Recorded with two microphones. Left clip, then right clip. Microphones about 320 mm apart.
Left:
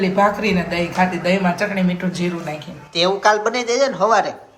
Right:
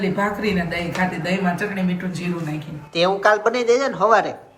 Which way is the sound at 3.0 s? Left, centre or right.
Centre.